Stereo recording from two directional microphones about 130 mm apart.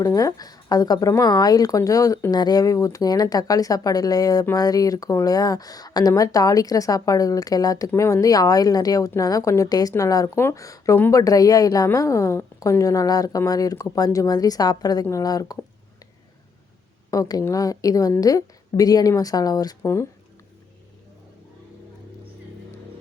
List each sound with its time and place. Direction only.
0.0 s speech: 25° left (ahead or behind)
17.1 s speech: 25° left (ahead or behind)